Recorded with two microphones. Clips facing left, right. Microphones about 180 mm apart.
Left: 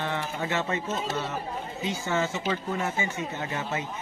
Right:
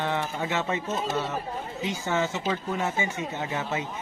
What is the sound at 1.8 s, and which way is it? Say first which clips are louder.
Speech: right 1 dB; 15° right (ahead or behind).